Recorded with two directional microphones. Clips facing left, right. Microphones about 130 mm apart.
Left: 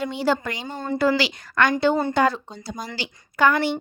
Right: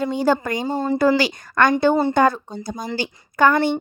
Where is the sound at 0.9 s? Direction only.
45° right (ahead or behind).